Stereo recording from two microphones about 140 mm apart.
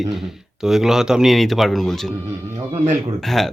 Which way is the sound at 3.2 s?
Centre (ahead or behind).